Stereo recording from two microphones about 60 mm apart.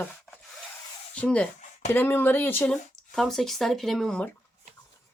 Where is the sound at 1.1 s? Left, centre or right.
Centre.